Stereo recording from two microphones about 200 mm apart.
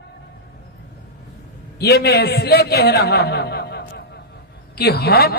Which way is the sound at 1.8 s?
55° left (ahead or behind).